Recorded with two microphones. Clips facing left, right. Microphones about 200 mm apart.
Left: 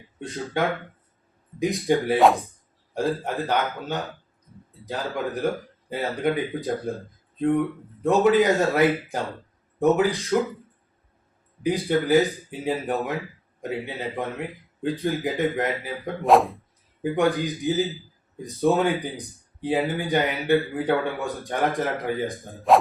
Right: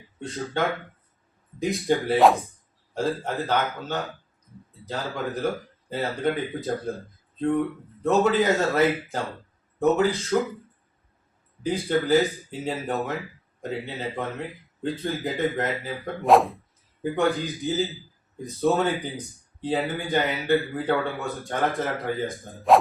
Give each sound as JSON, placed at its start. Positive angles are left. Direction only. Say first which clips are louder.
{"t": 1.5, "sound": "a man's voice", "louder": "left 2 dB", "side_deg": 15}
{"t": 2.1, "sound": "speech", "louder": "right 1 dB", "side_deg": 0}
{"t": 2.9, "sound": "a man's voice", "louder": "left 1 dB", "side_deg": 15}
{"t": 8.0, "sound": "a man's voice", "louder": "left 2 dB", "side_deg": 15}
{"t": 11.6, "sound": "a man's voice", "louder": "left 2 dB", "side_deg": 15}
{"t": 16.2, "sound": "speech", "louder": "even", "side_deg": 0}
{"t": 17.0, "sound": "a man's voice", "louder": "left 2 dB", "side_deg": 15}
{"t": 22.7, "sound": "music", "louder": "even", "side_deg": 0}